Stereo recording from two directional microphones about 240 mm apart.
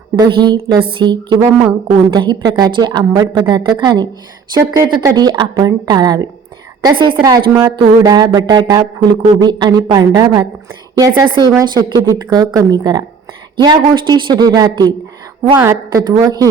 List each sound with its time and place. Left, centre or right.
0.2 s a woman's voice: centre